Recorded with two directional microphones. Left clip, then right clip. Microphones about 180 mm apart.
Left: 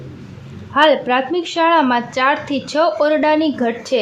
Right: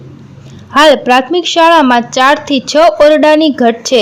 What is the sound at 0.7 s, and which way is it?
A woman's voice, 35° right (ahead or behind).